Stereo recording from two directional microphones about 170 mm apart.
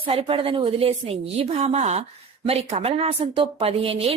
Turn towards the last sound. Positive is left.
turn(degrees=-35)  # may be behind; listen again after turning